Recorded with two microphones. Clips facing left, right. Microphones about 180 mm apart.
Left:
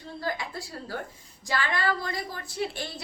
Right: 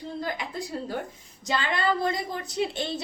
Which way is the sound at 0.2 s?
20° right (ahead or behind).